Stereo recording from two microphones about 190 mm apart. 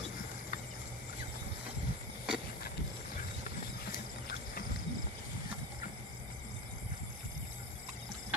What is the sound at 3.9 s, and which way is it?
Horse, 50° left (ahead or behind).